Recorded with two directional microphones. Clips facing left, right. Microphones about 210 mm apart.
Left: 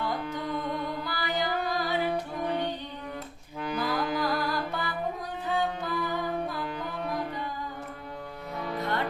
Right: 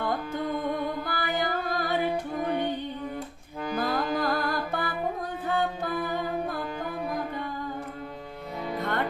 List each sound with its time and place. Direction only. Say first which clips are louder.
0.6 s music: right 3 dB; 50° right (ahead or behind)
3.8 s music: right 2 dB; 50° right (ahead or behind)
8.8 s music: right 1 dB; 50° right (ahead or behind)